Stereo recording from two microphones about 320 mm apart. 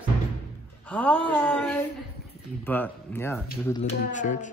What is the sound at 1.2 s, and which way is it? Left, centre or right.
Speech, centre.